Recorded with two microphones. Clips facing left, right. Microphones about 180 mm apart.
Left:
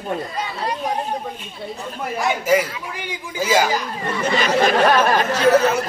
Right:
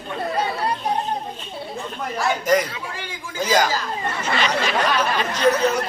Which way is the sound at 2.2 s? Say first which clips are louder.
Left 1 dB; 5° left (ahead or behind).